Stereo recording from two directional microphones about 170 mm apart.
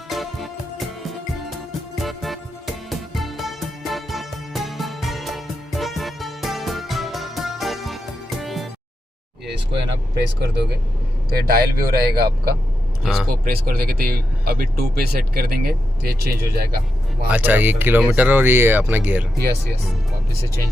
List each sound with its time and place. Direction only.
0.1 s music: centre (ahead or behind)
10.4 s speech: 75° right (ahead or behind)
11.3 s speech: 65° right (ahead or behind)
13.0 s speech: centre (ahead or behind)
13.4 s speech: 60° right (ahead or behind)
17.2 s speech: 10° right (ahead or behind)